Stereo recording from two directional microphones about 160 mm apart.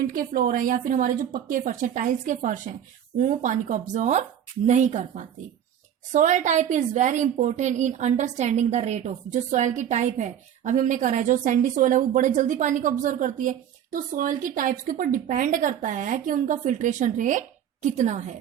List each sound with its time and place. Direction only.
0.1 s a woman's voice: 60° right (ahead or behind)